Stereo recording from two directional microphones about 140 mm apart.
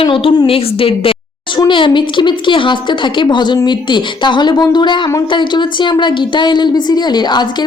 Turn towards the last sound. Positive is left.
turn(degrees=30)  # may be behind; listen again after turning